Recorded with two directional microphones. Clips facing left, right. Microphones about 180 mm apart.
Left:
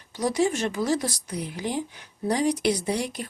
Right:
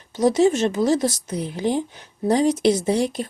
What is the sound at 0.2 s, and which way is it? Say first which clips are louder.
Speech: right 7 dB; 25° right (ahead or behind).